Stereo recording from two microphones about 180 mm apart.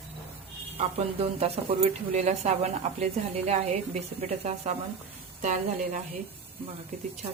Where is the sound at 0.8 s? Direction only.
35° right (ahead or behind).